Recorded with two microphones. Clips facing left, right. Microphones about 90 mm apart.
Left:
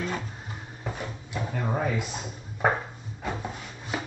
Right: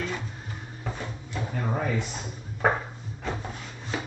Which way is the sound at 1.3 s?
10° left (ahead or behind).